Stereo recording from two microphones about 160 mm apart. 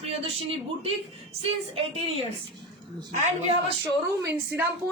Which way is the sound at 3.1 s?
45° right (ahead or behind).